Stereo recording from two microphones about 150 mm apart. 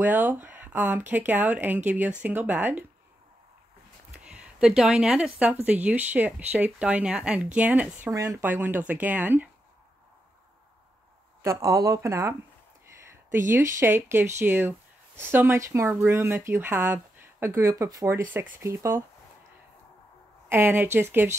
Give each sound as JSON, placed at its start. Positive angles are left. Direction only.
{"t": 0.0, "sound": "speech", "side_deg": -10}
{"t": 4.1, "sound": "a sound", "side_deg": -5}
{"t": 5.7, "sound": "speech", "side_deg": -10}
{"t": 8.1, "sound": "speech", "side_deg": -20}
{"t": 11.4, "sound": "speech", "side_deg": -20}
{"t": 13.5, "sound": "speech", "side_deg": -20}
{"t": 20.4, "sound": "speech", "side_deg": -15}